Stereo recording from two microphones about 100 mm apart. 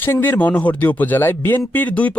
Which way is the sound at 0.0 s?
20° left (ahead or behind).